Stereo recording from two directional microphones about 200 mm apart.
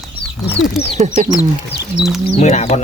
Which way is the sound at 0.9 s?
35° right (ahead or behind).